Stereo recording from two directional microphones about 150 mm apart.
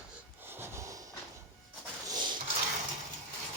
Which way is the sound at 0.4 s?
15° right (ahead or behind).